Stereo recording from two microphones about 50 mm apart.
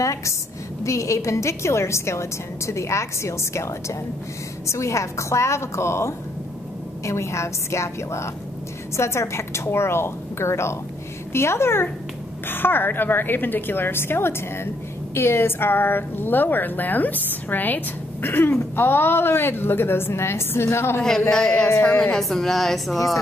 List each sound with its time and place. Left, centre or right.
0.0 s a woman's voice: left
4.6 s a woman's voice: left
7.1 s a woman's voice: left
12.4 s a woman's voice: left
21.3 s a woman's voice: centre